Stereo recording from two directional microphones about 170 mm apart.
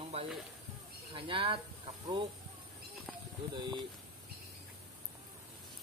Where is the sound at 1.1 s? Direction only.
30° right (ahead or behind).